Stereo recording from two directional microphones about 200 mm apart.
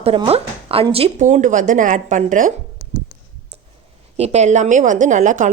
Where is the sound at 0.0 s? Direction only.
30° right (ahead or behind).